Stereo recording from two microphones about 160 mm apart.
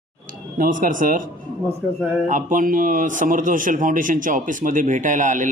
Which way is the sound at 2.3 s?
55° right (ahead or behind).